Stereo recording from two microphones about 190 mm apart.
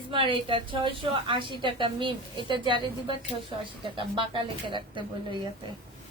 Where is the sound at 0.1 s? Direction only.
25° right (ahead or behind).